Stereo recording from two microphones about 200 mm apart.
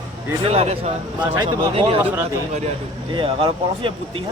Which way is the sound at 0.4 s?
30° right (ahead or behind).